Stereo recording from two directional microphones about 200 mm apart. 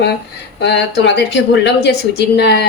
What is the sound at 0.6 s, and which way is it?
Speech, 60° left (ahead or behind).